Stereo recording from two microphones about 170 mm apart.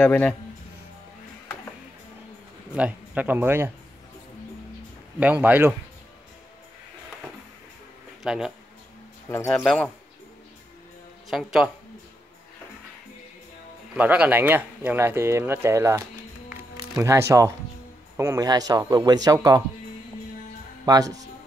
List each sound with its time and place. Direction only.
0.0 s a man's voice: 5° left (ahead or behind)
2.7 s speech: 10° right (ahead or behind)
5.2 s speech: 10° right (ahead or behind)
8.2 s speech: 5° right (ahead or behind)
9.3 s a man's voice: 15° left (ahead or behind)
11.2 s a woman's voice: 5° right (ahead or behind)
13.9 s speech: 10° right (ahead or behind)
20.8 s speech: 20° right (ahead or behind)